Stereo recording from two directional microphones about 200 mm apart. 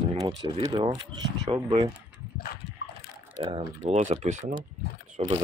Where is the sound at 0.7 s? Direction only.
20° right (ahead or behind).